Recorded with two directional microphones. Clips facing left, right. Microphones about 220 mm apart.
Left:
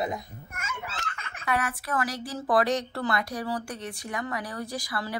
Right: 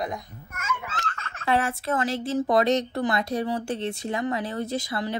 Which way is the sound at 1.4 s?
25° right (ahead or behind).